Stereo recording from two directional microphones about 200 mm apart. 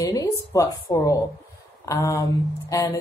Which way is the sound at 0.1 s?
15° left (ahead or behind).